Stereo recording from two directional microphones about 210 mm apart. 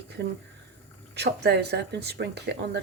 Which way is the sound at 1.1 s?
50° right (ahead or behind).